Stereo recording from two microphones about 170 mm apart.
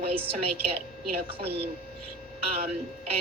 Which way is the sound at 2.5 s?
35° right (ahead or behind).